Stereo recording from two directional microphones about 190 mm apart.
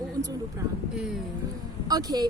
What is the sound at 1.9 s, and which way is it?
Speech, 20° right (ahead or behind).